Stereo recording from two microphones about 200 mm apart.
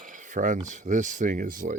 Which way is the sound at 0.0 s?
40° right (ahead or behind).